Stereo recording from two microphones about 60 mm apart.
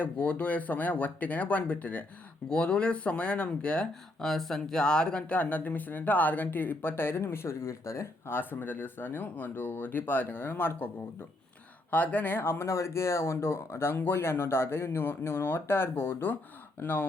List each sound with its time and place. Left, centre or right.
0.0 s speech: left
4.2 s speech: centre; by 8.0 s left
8.3 s speech: left
11.9 s speech: left